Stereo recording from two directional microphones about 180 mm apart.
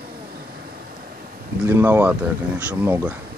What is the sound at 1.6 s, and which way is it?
Speech, 10° right (ahead or behind).